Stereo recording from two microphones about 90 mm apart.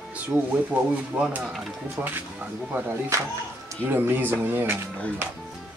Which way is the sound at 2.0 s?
20° right (ahead or behind).